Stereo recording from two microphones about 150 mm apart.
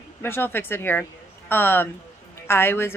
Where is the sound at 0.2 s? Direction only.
15° left (ahead or behind).